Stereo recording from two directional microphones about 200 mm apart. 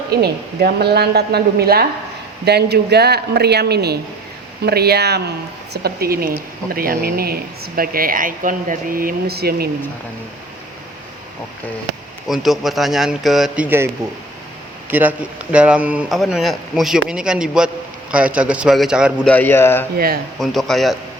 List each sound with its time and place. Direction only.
0.1 s speech: 50° right (ahead or behind)
12.3 s a man's voice: centre (ahead or behind)
19.3 s speech: 10° left (ahead or behind)
20.4 s speech: centre (ahead or behind)